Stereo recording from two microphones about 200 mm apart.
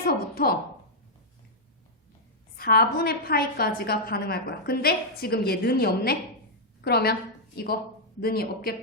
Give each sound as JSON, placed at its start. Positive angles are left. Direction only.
{"t": 0.1, "sound": "a woman's voice", "side_deg": 50}
{"t": 2.6, "sound": "a woman's voice", "side_deg": 50}